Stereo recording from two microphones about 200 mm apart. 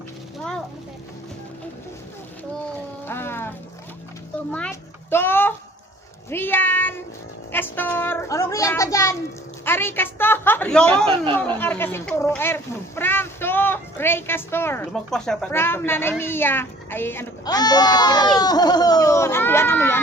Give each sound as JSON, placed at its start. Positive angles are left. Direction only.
{"t": 3.1, "sound": "music", "side_deg": 10}
{"t": 4.5, "sound": "a sound", "side_deg": 10}
{"t": 6.3, "sound": "speech", "side_deg": 10}